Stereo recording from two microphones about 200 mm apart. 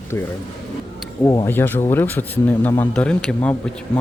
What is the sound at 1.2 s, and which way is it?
Speech, 15° left (ahead or behind).